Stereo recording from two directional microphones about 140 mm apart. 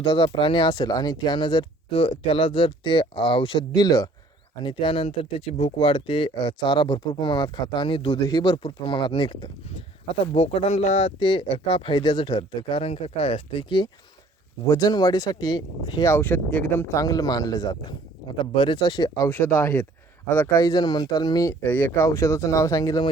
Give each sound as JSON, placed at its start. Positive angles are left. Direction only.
{"t": 0.0, "sound": "speech", "side_deg": 35}
{"t": 10.3, "sound": "speech", "side_deg": 45}
{"t": 11.2, "sound": "speech", "side_deg": 40}
{"t": 14.7, "sound": "speech", "side_deg": 25}
{"t": 16.9, "sound": "speech", "side_deg": 25}
{"t": 19.4, "sound": "speech", "side_deg": 10}
{"t": 21.6, "sound": "speech", "side_deg": 15}